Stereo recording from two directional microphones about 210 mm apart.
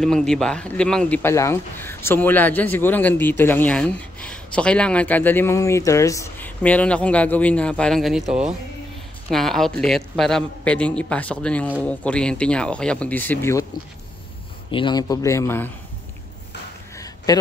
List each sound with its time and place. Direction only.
0.0 s a man's voice: 5° left (ahead or behind)
14.7 s speech: 20° left (ahead or behind)
16.9 s a sound: 15° left (ahead or behind)